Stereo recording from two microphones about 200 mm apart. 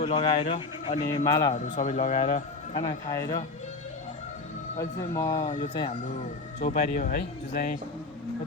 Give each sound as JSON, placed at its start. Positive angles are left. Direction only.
{"t": 0.0, "sound": "a man's voice", "side_deg": 25}
{"t": 1.5, "sound": "speech", "side_deg": 35}
{"t": 2.8, "sound": "speech", "side_deg": 15}
{"t": 4.8, "sound": "speech", "side_deg": 15}
{"t": 6.7, "sound": "speech", "side_deg": 45}